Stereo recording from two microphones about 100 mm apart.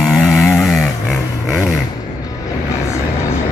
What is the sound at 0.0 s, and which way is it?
Vehicle, centre (ahead or behind).